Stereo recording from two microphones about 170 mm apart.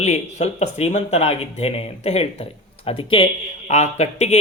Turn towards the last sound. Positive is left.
turn(degrees=40)  # may be behind; listen again after turning